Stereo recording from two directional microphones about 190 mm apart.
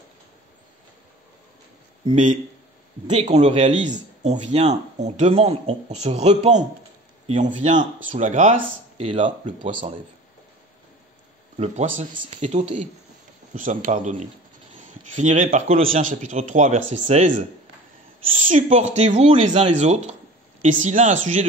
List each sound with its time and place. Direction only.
3.2 s speech: 35° right (ahead or behind)
11.5 s speech: 35° right (ahead or behind)
12.2 s speech: 30° right (ahead or behind)
12.4 s speech: 40° right (ahead or behind)